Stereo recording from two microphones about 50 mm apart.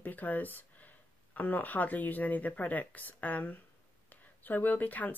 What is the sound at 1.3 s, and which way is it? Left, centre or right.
Speech, left.